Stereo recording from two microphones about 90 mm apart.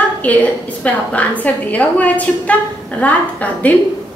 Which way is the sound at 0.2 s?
15° left (ahead or behind).